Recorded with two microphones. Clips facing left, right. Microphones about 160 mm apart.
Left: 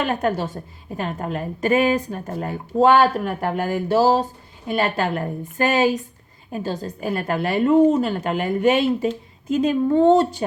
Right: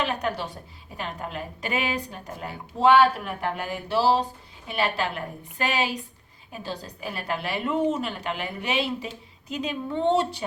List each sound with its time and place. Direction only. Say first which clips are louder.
0.0 s a woman's voice: left 6 dB; 50° left (ahead or behind)